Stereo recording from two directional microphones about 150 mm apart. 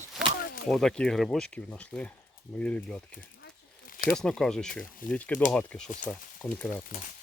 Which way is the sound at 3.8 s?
70° left (ahead or behind).